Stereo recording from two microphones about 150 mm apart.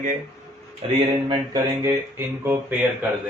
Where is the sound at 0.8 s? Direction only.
45° right (ahead or behind).